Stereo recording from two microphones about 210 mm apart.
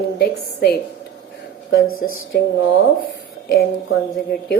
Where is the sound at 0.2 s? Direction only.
50° left (ahead or behind).